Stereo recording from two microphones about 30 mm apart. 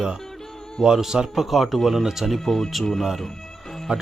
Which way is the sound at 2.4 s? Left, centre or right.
Centre.